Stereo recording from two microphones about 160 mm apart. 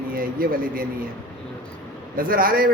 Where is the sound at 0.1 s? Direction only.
65° right (ahead or behind).